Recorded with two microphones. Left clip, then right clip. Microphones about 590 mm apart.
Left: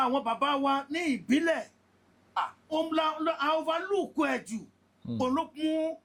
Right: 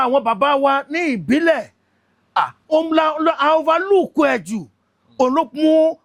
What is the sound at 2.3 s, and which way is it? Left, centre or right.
Speech, right.